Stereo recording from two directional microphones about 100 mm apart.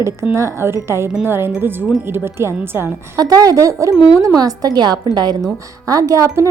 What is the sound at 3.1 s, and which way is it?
A woman's voice, 40° right (ahead or behind).